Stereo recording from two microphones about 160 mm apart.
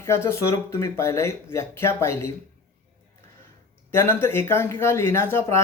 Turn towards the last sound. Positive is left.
turn(degrees=15)  # may be behind; listen again after turning